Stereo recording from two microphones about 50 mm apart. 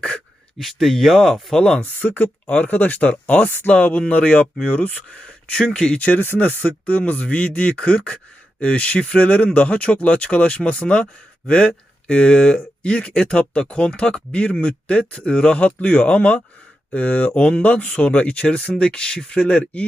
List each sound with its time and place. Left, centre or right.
0.6 s speech: centre
1.5 s speech: centre
1.8 s speech: left; by 19.5 s centre
19.5 s speech: left